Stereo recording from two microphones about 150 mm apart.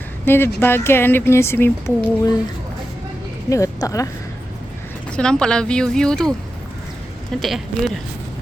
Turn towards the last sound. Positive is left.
turn(degrees=0)  # may be behind; listen again after turning